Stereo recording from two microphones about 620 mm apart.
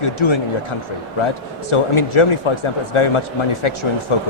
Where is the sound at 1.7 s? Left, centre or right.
Left.